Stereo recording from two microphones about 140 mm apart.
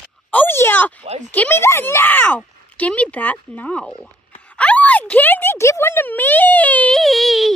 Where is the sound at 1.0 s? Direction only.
50° right (ahead or behind).